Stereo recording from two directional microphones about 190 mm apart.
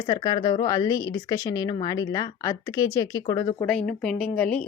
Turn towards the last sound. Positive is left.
turn(degrees=5)  # may be behind; listen again after turning